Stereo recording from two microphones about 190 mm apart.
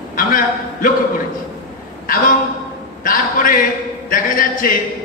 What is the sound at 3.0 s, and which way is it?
A man's voice, 50° left (ahead or behind).